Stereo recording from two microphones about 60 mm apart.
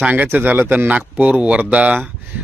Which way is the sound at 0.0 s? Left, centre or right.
Right.